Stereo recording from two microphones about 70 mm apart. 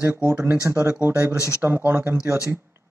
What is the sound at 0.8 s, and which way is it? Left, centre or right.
A man's voice, right.